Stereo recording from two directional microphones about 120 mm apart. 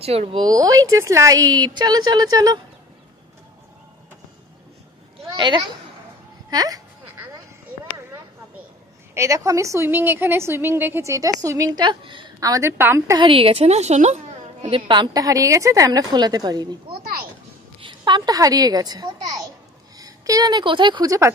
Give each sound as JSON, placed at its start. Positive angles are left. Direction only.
{"t": 0.0, "sound": "speech", "side_deg": -55}
{"t": 0.4, "sound": "a woman's voice", "side_deg": -30}
{"t": 5.3, "sound": "a child's voice", "side_deg": -40}
{"t": 9.1, "sound": "a woman's voice", "side_deg": -25}
{"t": 11.8, "sound": "a woman's voice", "side_deg": -45}
{"t": 12.4, "sound": "a woman's voice", "side_deg": -30}
{"t": 13.2, "sound": "a woman's voice", "side_deg": -50}
{"t": 14.9, "sound": "a woman's voice", "side_deg": -35}
{"t": 17.7, "sound": "a child's voice", "side_deg": -40}